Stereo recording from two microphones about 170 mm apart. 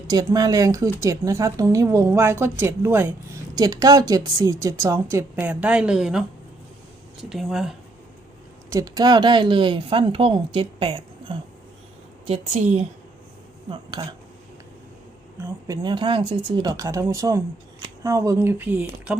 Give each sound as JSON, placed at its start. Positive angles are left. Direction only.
{"t": 0.1, "sound": "speech", "side_deg": -20}
{"t": 8.7, "sound": "a woman's voice", "side_deg": -20}
{"t": 13.7, "sound": "speech", "side_deg": -25}
{"t": 15.4, "sound": "speech", "side_deg": -15}